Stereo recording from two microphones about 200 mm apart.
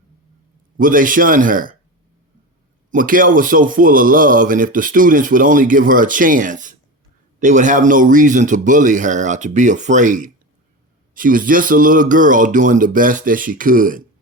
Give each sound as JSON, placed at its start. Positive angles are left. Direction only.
{"t": 0.8, "sound": "a man's voice", "side_deg": -40}
{"t": 2.9, "sound": "a man's voice", "side_deg": -45}